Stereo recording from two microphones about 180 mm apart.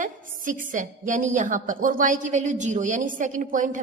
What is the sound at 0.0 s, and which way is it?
A woman's voice, 50° right (ahead or behind).